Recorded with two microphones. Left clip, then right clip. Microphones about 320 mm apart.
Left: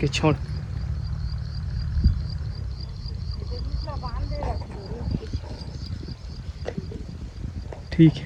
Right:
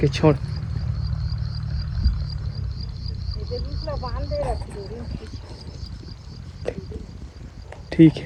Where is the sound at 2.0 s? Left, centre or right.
Left.